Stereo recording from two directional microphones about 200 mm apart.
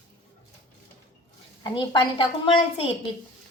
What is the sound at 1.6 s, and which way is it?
A woman's voice, 20° left (ahead or behind).